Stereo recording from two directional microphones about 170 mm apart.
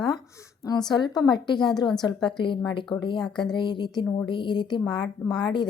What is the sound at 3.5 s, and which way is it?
A woman's voice, 25° left (ahead or behind).